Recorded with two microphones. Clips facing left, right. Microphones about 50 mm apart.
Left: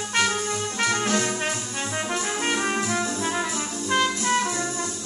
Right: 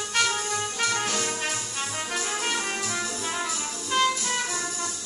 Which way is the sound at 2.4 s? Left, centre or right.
Centre.